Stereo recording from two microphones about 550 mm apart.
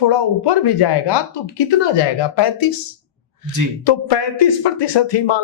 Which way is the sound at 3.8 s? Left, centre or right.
Left.